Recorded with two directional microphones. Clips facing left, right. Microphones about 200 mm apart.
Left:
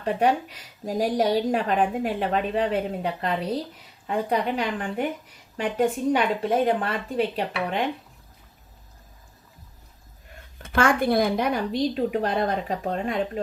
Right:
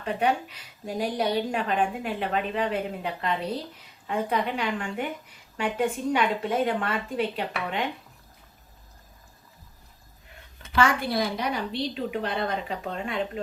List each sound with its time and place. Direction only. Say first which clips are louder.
0.0 s a woman's voice: left 3 dB; 40° left (ahead or behind)
10.6 s a woman's voice: left 3 dB; 50° left (ahead or behind)